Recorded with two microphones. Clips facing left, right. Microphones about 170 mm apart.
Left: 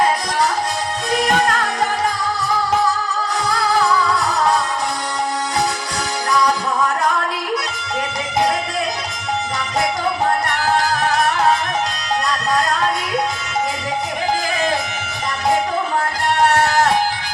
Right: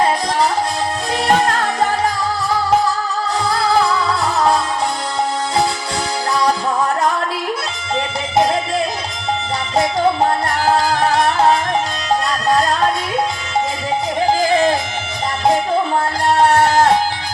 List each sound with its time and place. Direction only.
1.1 s music: 30° right (ahead or behind)